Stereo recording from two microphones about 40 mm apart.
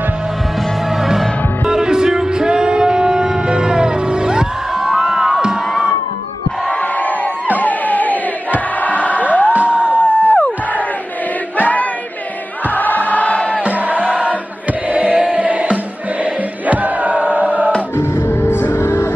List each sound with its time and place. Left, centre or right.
0.8 s music: centre
6.7 s crowd: left
7.6 s music: left
9.5 s a sound: right
10.0 s music: left
11.5 s choir: left
12.6 s music: left
13.6 s music: right
17.9 s music: left